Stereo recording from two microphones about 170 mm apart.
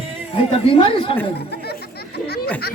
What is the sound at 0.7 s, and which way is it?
Speech, 35° left (ahead or behind).